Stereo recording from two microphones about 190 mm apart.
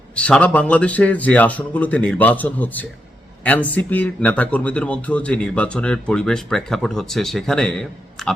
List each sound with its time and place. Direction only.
0.2 s a man's voice: 5° left (ahead or behind)